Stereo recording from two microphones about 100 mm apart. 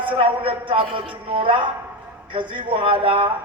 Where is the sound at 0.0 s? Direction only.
60° right (ahead or behind).